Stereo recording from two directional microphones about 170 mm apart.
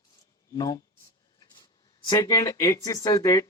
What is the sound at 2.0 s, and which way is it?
Speech, 20° left (ahead or behind).